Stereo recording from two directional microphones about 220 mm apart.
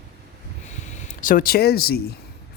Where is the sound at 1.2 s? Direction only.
40° left (ahead or behind).